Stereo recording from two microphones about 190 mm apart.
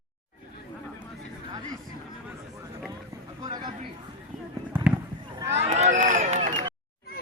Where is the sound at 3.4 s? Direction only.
20° right (ahead or behind).